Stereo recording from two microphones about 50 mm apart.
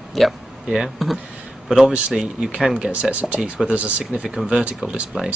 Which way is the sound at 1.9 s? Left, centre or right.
Right.